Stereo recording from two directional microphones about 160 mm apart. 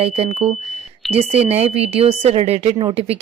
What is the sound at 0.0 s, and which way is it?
Speech, 40° right (ahead or behind).